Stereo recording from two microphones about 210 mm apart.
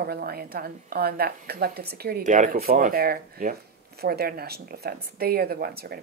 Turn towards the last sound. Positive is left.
turn(degrees=-45)  # may be behind; listen again after turning